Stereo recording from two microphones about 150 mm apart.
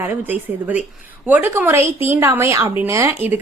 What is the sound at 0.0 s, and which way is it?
A woman's voice, 10° right (ahead or behind).